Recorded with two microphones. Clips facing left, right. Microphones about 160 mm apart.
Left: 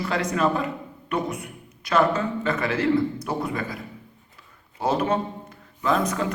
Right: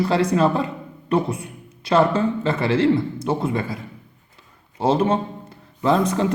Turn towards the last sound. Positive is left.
turn(degrees=-30)  # may be behind; listen again after turning